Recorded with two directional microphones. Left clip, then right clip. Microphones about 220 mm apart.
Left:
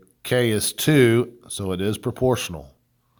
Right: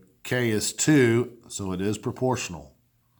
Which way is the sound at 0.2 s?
40° left (ahead or behind).